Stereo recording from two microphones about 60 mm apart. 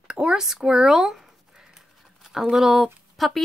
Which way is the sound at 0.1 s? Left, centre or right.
Centre.